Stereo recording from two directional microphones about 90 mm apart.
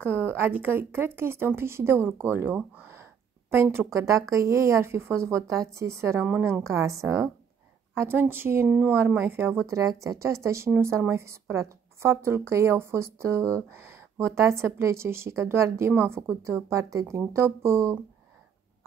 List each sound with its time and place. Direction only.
0.0 s speech: 25° right (ahead or behind)
2.9 s a sound: 25° right (ahead or behind)
3.6 s speech: 25° right (ahead or behind)
8.6 s speech: 15° right (ahead or behind)
8.9 s speech: 30° right (ahead or behind)
9.7 s speech: 35° right (ahead or behind)